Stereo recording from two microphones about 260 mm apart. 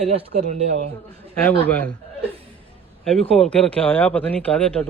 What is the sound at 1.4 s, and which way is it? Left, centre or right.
Speech, centre.